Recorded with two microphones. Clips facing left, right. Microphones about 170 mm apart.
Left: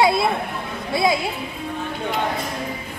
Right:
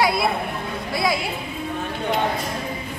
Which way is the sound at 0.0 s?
25° left (ahead or behind).